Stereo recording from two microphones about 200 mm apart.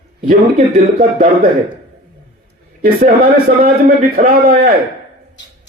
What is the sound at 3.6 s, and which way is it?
A man's voice, 45° right (ahead or behind).